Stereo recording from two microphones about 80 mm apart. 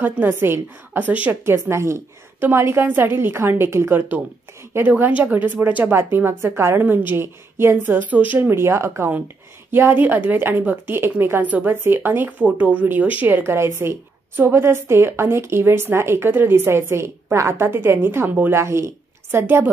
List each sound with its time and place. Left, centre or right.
0.0 s a woman's voice: right
1.3 s a woman's voice: right
8.5 s a woman's voice: right